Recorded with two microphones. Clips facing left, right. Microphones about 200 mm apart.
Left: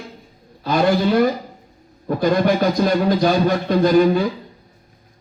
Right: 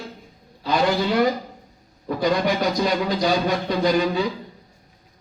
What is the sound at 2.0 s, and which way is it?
A man's voice, 50° left (ahead or behind).